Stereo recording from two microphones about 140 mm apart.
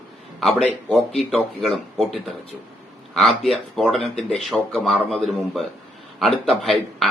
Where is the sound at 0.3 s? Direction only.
5° left (ahead or behind).